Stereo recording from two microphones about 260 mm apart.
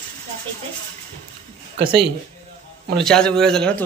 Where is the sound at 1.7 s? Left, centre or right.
Right.